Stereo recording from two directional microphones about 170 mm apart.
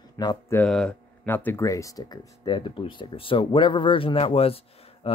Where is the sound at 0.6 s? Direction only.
5° left (ahead or behind).